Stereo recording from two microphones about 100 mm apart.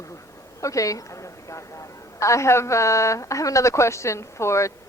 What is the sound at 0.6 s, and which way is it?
A woman's voice, 35° left (ahead or behind).